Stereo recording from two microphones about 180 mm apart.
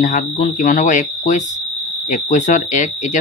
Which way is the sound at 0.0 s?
45° left (ahead or behind).